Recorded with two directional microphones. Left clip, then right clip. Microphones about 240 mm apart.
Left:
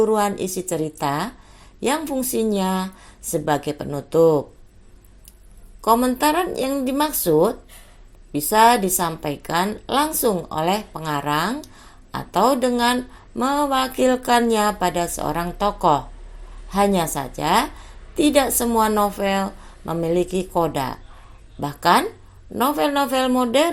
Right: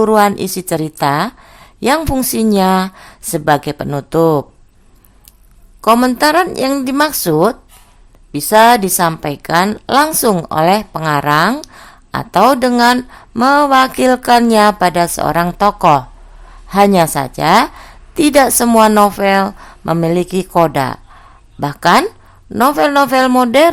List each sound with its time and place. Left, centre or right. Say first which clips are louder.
0.0 s a woman's voice: right 8 dB; right
5.8 s a woman's voice: right 7 dB; right